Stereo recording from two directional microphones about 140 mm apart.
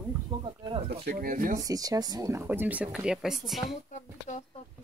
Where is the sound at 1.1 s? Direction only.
80° right.